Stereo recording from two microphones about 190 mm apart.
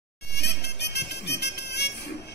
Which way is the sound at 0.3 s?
60° left (ahead or behind).